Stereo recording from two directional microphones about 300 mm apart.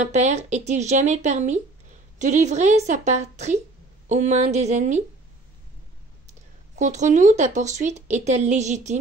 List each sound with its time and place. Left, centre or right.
0.0 s speech: right
6.2 s speech: right